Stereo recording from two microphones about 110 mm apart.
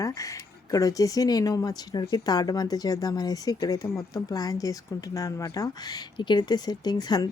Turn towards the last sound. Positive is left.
turn(degrees=35)  # may be behind; listen again after turning